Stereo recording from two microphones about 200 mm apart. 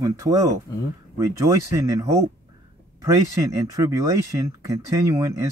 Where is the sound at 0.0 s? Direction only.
15° right (ahead or behind).